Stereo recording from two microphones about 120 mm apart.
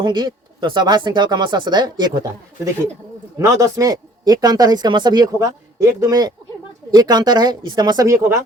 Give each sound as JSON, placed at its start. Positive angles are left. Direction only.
{"t": 0.0, "sound": "speech", "side_deg": -40}
{"t": 3.3, "sound": "speech", "side_deg": -25}